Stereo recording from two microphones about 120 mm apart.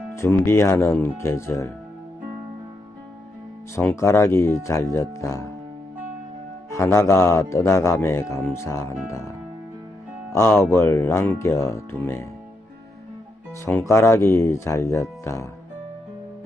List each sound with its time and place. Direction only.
0.2 s speech: 20° left (ahead or behind)
3.8 s speech: 20° left (ahead or behind)
6.7 s speech: 25° left (ahead or behind)
10.3 s speech: 25° left (ahead or behind)
13.7 s speech: 20° left (ahead or behind)